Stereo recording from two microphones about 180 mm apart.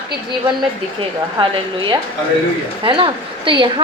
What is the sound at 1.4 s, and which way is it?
A woman's voice, 25° right (ahead or behind).